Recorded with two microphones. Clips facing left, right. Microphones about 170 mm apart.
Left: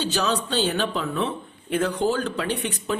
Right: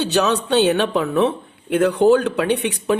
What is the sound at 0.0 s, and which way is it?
A woman's voice, 65° right (ahead or behind).